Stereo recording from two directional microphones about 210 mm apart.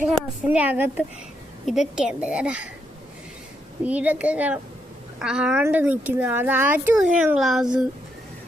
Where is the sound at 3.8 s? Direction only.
5° right (ahead or behind).